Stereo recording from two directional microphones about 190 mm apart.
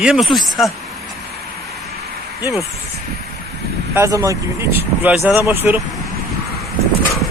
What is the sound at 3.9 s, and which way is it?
Speech, 15° right (ahead or behind).